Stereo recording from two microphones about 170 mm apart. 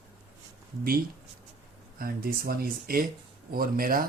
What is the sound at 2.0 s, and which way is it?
Speech, 60° right (ahead or behind).